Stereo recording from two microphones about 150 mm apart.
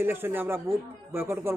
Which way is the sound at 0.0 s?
15° right (ahead or behind).